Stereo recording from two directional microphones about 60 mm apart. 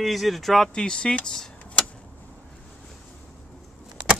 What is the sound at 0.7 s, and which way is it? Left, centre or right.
Speech, centre.